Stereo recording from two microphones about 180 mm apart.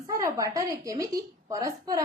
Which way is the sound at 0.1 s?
15° right (ahead or behind).